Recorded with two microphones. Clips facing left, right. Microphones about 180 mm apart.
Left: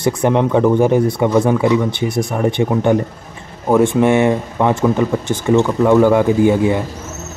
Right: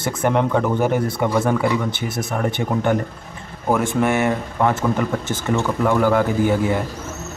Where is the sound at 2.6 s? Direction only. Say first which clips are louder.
Left 6 dB; 20° left (ahead or behind).